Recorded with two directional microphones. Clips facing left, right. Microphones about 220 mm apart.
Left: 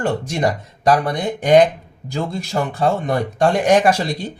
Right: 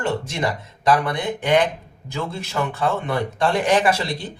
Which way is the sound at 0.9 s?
40° left (ahead or behind).